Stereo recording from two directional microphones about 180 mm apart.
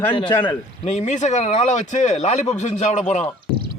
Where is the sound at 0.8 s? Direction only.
40° left (ahead or behind).